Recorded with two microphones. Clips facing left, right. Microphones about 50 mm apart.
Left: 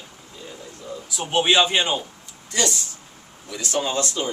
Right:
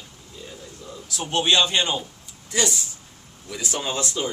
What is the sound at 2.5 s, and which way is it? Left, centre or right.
A man's voice, centre.